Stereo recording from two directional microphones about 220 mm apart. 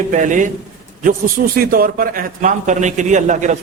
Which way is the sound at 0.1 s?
35° right (ahead or behind).